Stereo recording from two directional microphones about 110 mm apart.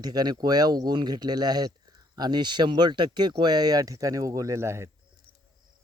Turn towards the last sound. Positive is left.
turn(degrees=-25)  # may be behind; listen again after turning